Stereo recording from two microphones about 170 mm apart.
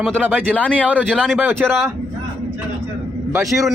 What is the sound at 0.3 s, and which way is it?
Speech, 10° right (ahead or behind).